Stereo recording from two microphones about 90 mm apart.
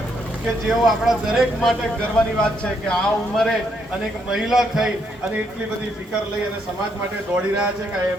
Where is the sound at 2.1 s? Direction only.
10° left (ahead or behind).